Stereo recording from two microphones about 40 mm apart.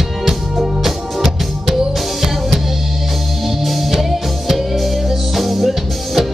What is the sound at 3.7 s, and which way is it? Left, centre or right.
Music, centre.